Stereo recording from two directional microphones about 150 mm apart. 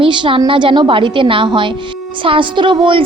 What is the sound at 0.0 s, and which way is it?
A woman's voice, 35° right (ahead or behind).